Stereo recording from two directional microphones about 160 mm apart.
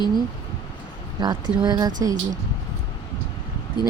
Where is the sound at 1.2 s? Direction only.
25° right (ahead or behind).